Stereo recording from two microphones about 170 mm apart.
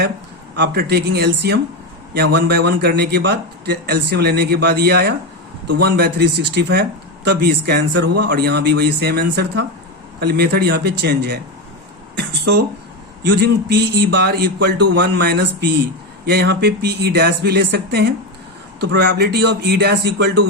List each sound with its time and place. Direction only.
0.5 s a man's voice: 75° right (ahead or behind)